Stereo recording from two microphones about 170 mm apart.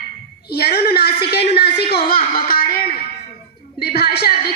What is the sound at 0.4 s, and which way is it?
A woman's voice, 70° left (ahead or behind).